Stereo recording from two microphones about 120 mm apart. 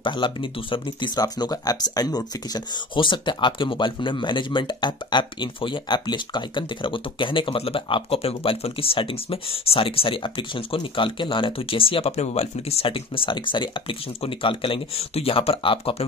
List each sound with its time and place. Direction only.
0.0 s speech: 45° left (ahead or behind)
12.1 s speech: 60° left (ahead or behind)